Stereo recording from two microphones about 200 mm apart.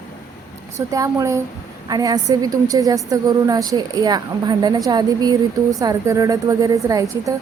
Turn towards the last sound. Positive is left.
turn(degrees=-15)  # may be behind; listen again after turning